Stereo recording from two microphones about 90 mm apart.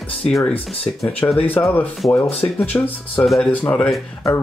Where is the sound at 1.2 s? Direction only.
40° left (ahead or behind).